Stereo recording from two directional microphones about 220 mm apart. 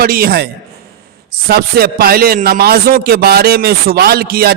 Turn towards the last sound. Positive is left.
turn(degrees=-45)  # may be behind; listen again after turning